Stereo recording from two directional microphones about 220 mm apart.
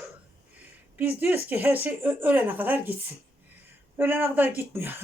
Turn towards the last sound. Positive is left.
turn(degrees=-10)  # may be behind; listen again after turning